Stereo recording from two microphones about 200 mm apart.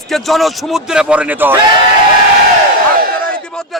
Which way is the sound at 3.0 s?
45° right (ahead or behind).